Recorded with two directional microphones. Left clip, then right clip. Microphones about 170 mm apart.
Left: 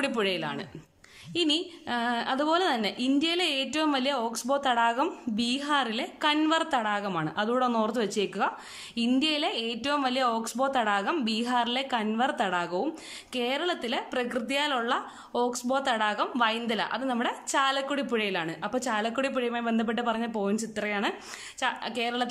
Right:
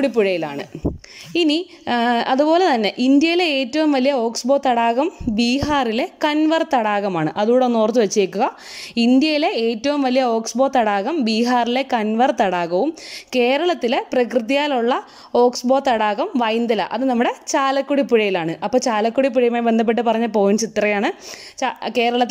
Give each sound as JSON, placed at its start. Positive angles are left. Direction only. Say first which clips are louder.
{"t": 0.0, "sound": "a woman's voice", "louder": "right 10 dB", "side_deg": -30}